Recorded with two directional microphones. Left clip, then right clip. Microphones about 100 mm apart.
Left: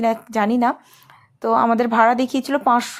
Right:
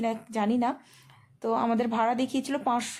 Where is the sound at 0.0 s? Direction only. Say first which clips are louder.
Left 10 dB; 35° left (ahead or behind).